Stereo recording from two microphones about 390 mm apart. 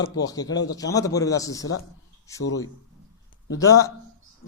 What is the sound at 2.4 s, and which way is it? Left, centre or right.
Speech, left.